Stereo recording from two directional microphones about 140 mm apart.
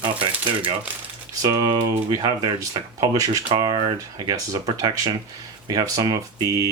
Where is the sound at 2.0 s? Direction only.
30° right (ahead or behind).